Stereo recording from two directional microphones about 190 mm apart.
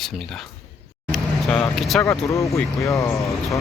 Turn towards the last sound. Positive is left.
turn(degrees=15)  # may be behind; listen again after turning